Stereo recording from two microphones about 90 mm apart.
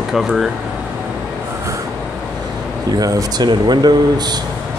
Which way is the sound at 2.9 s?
45° right (ahead or behind).